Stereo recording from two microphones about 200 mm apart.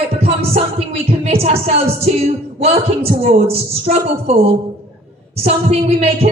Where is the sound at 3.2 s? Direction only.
30° right (ahead or behind).